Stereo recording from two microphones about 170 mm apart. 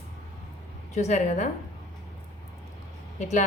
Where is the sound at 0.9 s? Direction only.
45° left (ahead or behind).